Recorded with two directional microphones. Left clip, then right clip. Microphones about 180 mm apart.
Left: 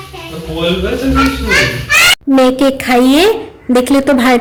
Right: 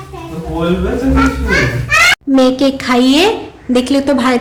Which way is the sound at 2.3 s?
20° left (ahead or behind).